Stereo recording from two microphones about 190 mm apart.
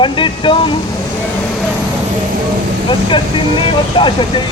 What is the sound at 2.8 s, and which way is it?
Speech, 25° left (ahead or behind).